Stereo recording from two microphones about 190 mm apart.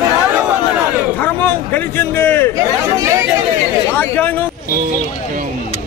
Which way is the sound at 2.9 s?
15° right (ahead or behind).